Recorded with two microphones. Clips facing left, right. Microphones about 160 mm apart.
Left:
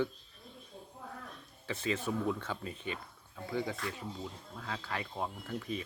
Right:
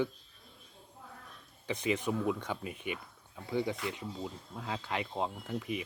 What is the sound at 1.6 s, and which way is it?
Speech, 15° right (ahead or behind).